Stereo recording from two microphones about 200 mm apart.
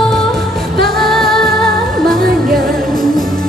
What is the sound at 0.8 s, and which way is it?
Music, centre (ahead or behind).